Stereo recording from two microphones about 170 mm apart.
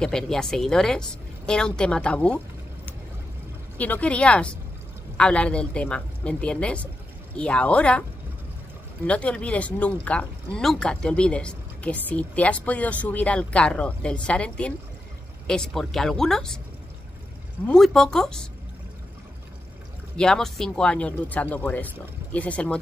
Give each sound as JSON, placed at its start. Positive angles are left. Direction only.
{"t": 0.0, "sound": "speech", "side_deg": 5}
{"t": 9.0, "sound": "speech", "side_deg": 5}
{"t": 17.6, "sound": "speech", "side_deg": 0}
{"t": 20.2, "sound": "speech", "side_deg": 5}